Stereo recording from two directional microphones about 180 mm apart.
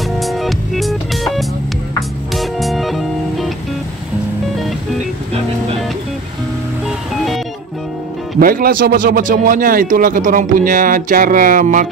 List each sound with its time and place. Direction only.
0.2 s music: centre (ahead or behind)
8.4 s a man's voice: 55° right (ahead or behind)